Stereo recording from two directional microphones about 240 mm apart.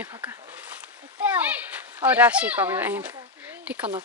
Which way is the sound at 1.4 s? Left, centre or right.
Centre.